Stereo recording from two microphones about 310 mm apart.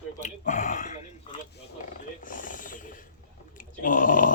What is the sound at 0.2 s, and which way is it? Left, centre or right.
Grunt, left.